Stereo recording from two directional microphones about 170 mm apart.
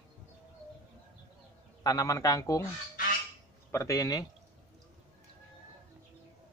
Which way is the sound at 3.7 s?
20° left (ahead or behind).